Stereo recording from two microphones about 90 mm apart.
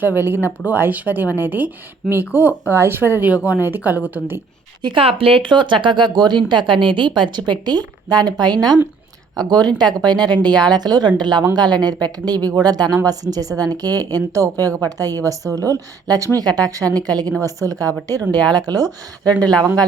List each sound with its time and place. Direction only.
0.0 s speech: 25° right (ahead or behind)
4.8 s a woman's voice: 70° right (ahead or behind); by 18.9 s 45° right (ahead or behind)
19.2 s speech: 15° left (ahead or behind)